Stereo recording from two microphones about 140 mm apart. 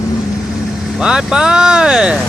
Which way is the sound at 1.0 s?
5° right (ahead or behind).